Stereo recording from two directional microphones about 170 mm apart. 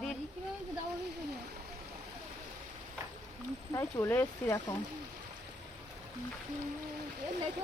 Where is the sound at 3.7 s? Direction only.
15° left (ahead or behind).